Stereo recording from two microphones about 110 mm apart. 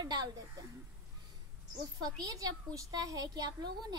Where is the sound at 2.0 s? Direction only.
30° right (ahead or behind).